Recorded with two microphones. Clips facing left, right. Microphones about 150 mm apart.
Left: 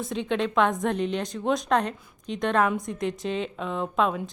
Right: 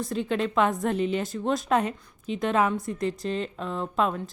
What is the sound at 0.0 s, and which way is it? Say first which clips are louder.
A woman's voice: even; centre (ahead or behind).